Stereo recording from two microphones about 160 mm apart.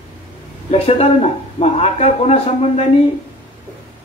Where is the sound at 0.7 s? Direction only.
40° left (ahead or behind).